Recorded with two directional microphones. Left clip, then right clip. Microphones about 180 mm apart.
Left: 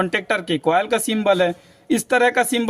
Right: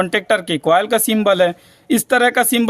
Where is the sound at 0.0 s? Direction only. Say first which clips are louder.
Right 4 dB; 35° right (ahead or behind).